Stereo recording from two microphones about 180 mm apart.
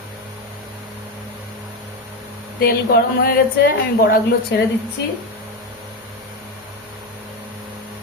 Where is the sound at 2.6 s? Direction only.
55° left (ahead or behind).